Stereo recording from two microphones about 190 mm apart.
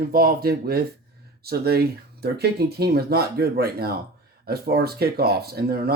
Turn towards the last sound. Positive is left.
turn(degrees=-55)  # may be behind; listen again after turning